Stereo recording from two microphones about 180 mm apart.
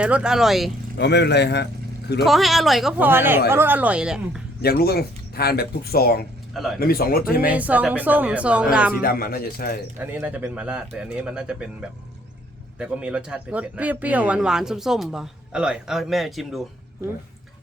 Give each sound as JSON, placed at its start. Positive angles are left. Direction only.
{"t": 0.0, "sound": "speech", "side_deg": -5}
{"t": 0.9, "sound": "speech", "side_deg": 70}
{"t": 2.2, "sound": "speech", "side_deg": 0}
{"t": 4.6, "sound": "speech", "side_deg": 60}
{"t": 6.5, "sound": "speech", "side_deg": 0}
{"t": 6.7, "sound": "speech", "side_deg": 55}
{"t": 7.5, "sound": "speech", "side_deg": -10}
{"t": 9.0, "sound": "speech", "side_deg": 55}
{"t": 10.0, "sound": "speech", "side_deg": -10}